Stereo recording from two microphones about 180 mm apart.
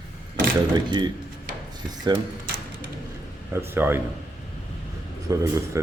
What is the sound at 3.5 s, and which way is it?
Speech, 15° right (ahead or behind).